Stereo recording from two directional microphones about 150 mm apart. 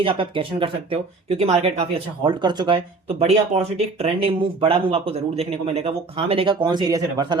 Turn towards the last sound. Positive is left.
turn(degrees=-25)  # may be behind; listen again after turning